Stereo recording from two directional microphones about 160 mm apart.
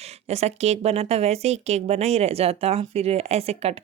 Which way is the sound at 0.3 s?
40° right (ahead or behind).